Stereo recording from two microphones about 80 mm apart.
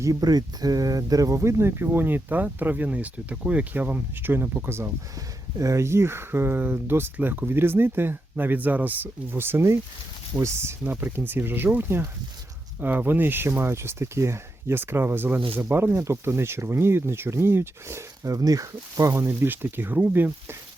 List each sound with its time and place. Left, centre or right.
0.0 s speech: right
10.9 s speech: right
19.1 s speech: right